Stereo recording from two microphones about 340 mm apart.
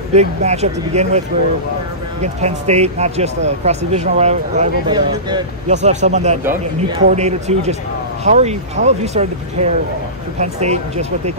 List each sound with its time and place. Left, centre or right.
0.1 s speech: centre
2.2 s speech: centre